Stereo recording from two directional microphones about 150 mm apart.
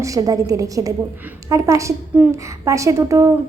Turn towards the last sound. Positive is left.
turn(degrees=-20)  # may be behind; listen again after turning